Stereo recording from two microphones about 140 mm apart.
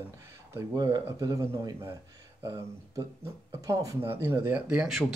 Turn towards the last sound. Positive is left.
turn(degrees=-5)  # may be behind; listen again after turning